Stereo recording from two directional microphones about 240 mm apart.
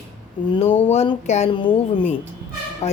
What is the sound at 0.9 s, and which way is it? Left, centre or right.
Speech, left.